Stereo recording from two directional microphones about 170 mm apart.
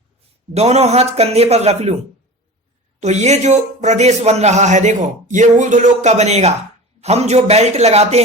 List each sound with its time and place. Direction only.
0.5 s speech: 40° right (ahead or behind)
3.0 s speech: 40° right (ahead or behind)